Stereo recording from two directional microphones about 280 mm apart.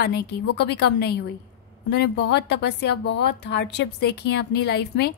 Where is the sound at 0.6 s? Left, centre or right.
Left.